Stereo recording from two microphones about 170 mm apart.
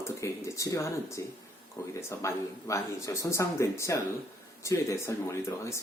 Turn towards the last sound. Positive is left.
turn(degrees=15)  # may be behind; listen again after turning